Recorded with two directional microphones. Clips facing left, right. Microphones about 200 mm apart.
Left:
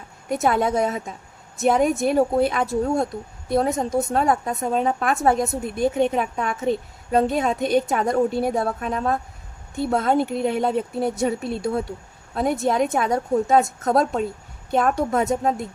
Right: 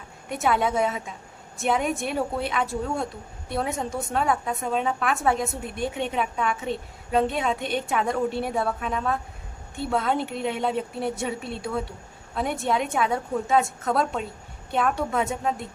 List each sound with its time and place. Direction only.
0.3 s a woman's voice: 40° left (ahead or behind)